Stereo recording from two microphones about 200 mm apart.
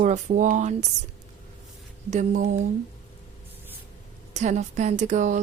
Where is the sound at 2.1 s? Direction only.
40° right (ahead or behind).